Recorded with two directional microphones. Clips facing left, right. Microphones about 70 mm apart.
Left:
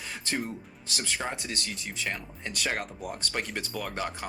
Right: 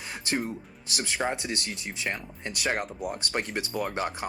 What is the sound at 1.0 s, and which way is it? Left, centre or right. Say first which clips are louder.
Speech: right 4 dB; right.